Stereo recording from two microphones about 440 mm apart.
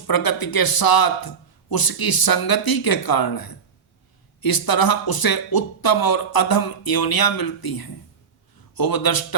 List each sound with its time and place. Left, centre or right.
0.1 s speech: left